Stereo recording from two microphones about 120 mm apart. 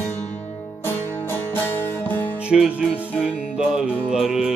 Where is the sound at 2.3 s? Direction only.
10° right (ahead or behind).